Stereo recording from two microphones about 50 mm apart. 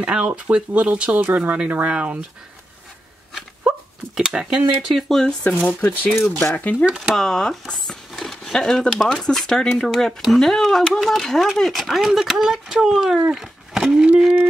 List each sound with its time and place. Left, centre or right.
0.0 s speech: right
1.2 s speech: right
1.9 s speech: right
3.3 s a sound: centre
5.5 s speech: left
7.2 s speech: centre
8.1 s a sound: centre
8.5 s speech: centre
13.3 s a sound: centre
14.0 s speech: right